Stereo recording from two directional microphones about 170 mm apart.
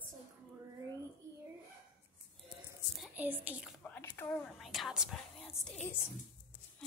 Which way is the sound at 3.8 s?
10° left (ahead or behind).